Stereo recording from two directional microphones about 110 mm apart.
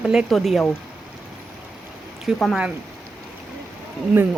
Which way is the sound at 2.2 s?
Centre (ahead or behind).